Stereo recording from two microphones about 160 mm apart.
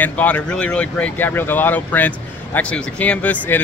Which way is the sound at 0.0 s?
10° left (ahead or behind).